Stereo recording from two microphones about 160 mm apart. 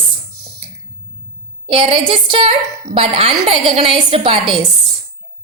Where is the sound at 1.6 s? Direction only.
35° right (ahead or behind).